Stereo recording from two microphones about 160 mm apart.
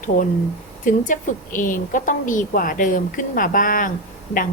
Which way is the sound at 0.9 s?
55° left (ahead or behind).